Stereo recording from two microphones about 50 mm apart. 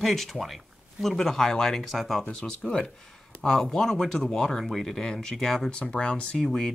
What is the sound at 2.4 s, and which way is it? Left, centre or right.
Speech, centre.